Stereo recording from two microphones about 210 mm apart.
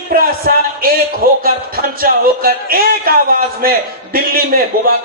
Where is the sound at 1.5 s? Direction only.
45° right (ahead or behind).